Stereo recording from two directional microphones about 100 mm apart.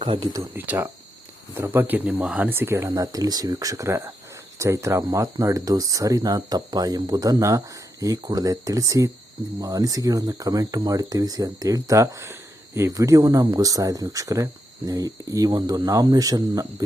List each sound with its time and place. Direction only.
0.5 s speech: 20° right (ahead or behind)
2.5 s speech: 25° right (ahead or behind)
2.9 s speech: 35° right (ahead or behind)